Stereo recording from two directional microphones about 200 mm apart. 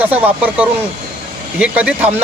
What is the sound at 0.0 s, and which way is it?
A man's voice, 10° right (ahead or behind).